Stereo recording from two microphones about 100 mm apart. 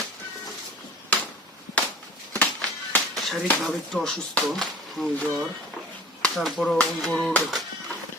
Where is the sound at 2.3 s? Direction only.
15° left (ahead or behind).